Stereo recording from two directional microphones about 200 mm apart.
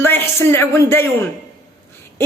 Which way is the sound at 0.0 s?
10° left (ahead or behind).